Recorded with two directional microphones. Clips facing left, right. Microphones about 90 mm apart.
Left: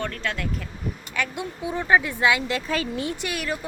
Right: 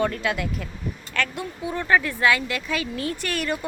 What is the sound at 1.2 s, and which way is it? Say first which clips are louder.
Speech: right 1 dB; 15° left (ahead or behind).